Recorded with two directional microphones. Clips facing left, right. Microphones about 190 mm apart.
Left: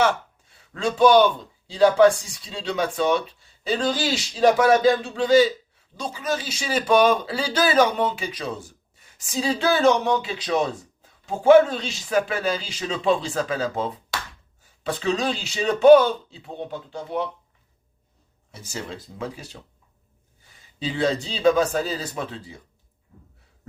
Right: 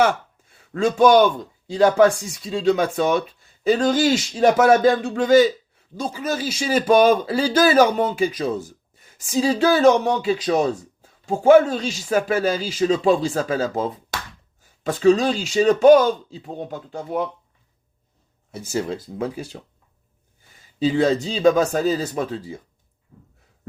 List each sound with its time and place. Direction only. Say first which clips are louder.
0.7 s speech: right 2 dB; 45° right (ahead or behind)
2.4 s speech: right 8 dB; 45° right (ahead or behind)
14.8 s speech: right 8 dB; 40° right (ahead or behind)
18.5 s speech: right 9 dB; 45° right (ahead or behind)
20.7 s speech: right 6 dB; 45° right (ahead or behind)